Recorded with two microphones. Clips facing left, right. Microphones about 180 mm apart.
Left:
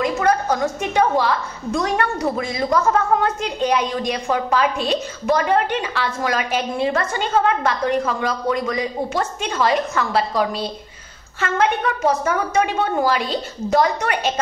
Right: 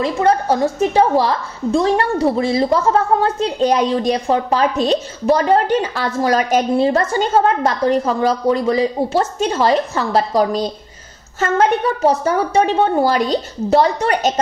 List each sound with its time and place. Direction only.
0.0 s a woman's voice: 30° right (ahead or behind)